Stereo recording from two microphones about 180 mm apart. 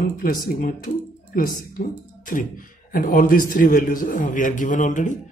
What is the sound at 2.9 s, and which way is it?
Speech, 50° left (ahead or behind).